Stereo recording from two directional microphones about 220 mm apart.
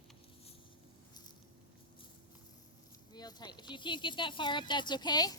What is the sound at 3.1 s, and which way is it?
Speech, 20° left (ahead or behind).